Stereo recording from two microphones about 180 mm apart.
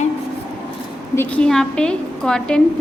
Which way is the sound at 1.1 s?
5° left (ahead or behind).